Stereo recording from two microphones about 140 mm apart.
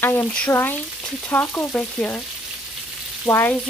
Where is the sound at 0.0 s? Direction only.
15° left (ahead or behind).